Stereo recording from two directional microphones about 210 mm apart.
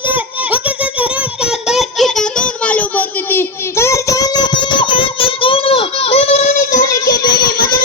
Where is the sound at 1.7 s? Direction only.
Centre (ahead or behind).